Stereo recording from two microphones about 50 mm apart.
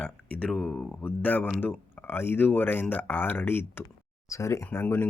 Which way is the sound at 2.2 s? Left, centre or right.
Left.